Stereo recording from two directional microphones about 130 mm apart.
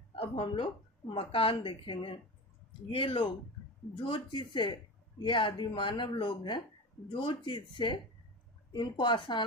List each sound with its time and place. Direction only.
0.1 s speech: 40° left (ahead or behind)